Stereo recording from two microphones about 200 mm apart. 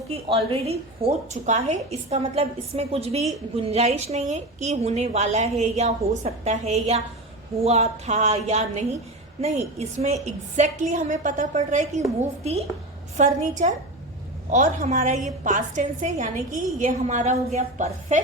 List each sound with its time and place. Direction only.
0.1 s a woman's voice: 30° right (ahead or behind)
13.1 s a woman's voice: 35° right (ahead or behind)